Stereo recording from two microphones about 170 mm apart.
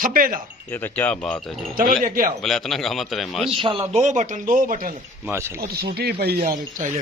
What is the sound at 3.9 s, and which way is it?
Speech, 45° right (ahead or behind).